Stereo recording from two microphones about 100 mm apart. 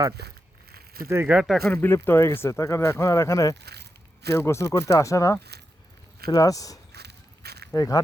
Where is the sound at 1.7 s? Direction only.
20° left (ahead or behind).